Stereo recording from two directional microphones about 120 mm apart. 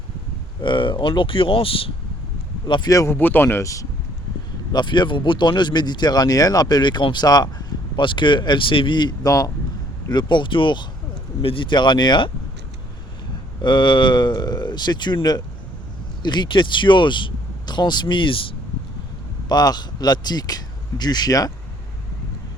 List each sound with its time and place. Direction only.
0.6 s speech: 40° left (ahead or behind)
2.9 s speech: 25° left (ahead or behind)
4.7 s speech: 40° left (ahead or behind)
13.6 s speech: 40° left (ahead or behind)
19.5 s speech: 35° left (ahead or behind)